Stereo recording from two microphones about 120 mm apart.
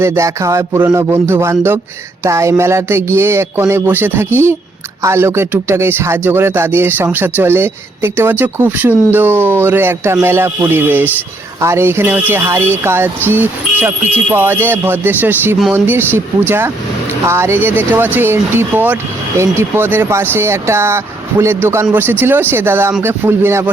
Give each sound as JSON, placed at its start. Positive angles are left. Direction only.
{"t": 0.0, "sound": "speech", "side_deg": -25}